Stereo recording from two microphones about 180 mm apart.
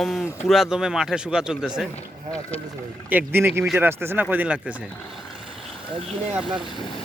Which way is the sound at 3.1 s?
10° right (ahead or behind).